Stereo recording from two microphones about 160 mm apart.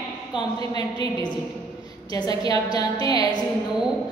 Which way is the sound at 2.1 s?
25° left (ahead or behind).